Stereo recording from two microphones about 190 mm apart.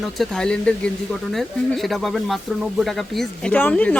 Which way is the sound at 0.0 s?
Centre (ahead or behind).